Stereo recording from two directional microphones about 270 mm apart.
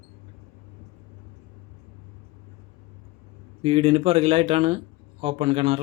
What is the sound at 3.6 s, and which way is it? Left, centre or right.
Speech, right.